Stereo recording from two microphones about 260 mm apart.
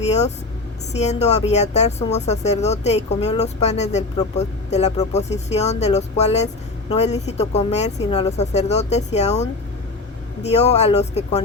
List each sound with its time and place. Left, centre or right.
0.0 s vehicle: left
0.9 s speech: left